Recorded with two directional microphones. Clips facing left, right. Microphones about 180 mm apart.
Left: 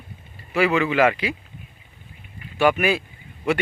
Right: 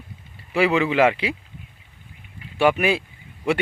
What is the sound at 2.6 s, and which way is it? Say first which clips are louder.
Speech: even; 25° right (ahead or behind).